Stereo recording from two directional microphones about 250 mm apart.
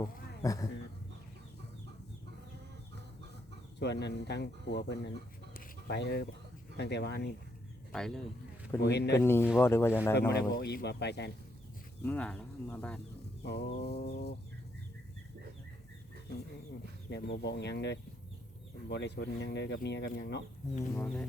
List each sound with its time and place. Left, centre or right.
0.4 s speech: centre
3.8 s speech: left
5.5 s a sound: left
6.7 s speech: left
7.9 s speech: centre
8.8 s speech: left
9.1 s speech: centre
10.2 s speech: left
12.0 s speech: centre
13.4 s speech: left
17.1 s speech: left
20.9 s speech: centre